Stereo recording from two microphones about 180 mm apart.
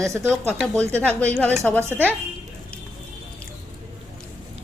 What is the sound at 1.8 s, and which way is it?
Speech, 15° right (ahead or behind).